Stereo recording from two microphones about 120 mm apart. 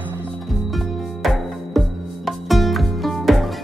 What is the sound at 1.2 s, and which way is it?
Music, centre (ahead or behind).